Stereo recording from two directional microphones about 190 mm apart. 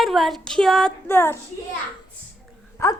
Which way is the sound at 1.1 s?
10° left (ahead or behind).